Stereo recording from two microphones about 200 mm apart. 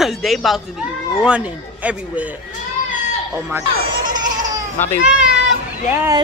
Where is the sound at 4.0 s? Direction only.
40° right (ahead or behind).